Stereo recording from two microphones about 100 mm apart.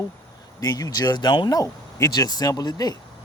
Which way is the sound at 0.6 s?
40° left (ahead or behind).